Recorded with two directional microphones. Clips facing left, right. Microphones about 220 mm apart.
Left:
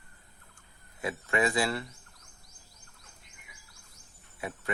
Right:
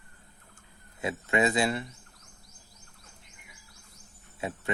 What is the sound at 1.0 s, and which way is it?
Speech, 25° right (ahead or behind).